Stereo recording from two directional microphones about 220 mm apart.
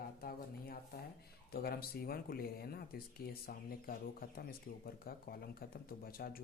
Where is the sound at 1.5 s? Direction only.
45° left (ahead or behind).